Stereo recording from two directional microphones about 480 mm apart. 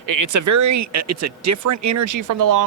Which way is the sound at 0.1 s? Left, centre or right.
Right.